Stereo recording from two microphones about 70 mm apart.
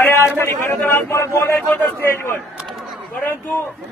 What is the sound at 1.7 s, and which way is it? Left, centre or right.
A man's voice, left.